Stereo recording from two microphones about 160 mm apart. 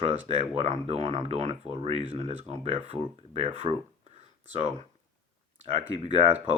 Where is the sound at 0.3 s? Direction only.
40° right (ahead or behind).